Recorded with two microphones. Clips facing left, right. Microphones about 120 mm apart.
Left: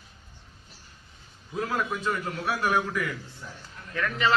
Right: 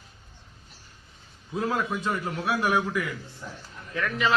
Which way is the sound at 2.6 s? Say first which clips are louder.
Even; 5° right (ahead or behind).